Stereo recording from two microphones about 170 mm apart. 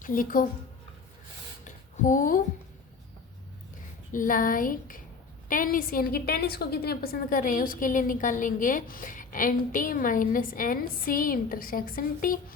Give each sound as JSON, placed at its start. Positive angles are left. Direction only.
{"t": 0.0, "sound": "speech", "side_deg": 55}
{"t": 1.6, "sound": "a sound", "side_deg": 50}
{"t": 4.1, "sound": "a woman's voice", "side_deg": 50}